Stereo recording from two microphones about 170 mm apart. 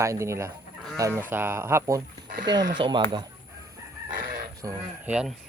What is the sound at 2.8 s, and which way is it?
Speech, 25° right (ahead or behind).